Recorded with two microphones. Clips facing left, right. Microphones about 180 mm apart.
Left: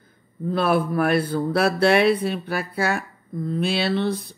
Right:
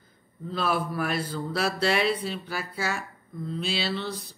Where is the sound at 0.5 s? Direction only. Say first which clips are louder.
Left 7 dB; 60° left (ahead or behind).